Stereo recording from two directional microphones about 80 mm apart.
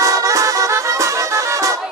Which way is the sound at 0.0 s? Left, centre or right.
Right.